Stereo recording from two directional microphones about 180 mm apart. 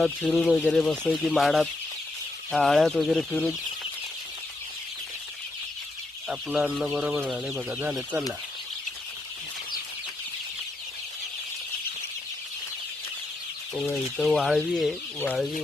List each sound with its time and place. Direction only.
0.0 s speech: centre (ahead or behind)
6.2 s speech: 5° right (ahead or behind)
14.2 s speech: centre (ahead or behind)